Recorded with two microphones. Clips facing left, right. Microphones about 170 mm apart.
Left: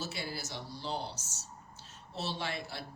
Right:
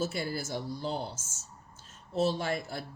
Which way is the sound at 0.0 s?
50° right (ahead or behind).